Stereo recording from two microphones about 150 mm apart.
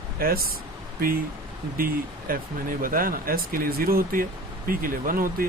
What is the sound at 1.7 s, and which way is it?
Speech, 75° right (ahead or behind).